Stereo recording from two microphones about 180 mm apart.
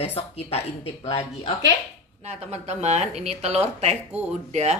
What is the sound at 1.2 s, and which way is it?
Speech, 25° left (ahead or behind).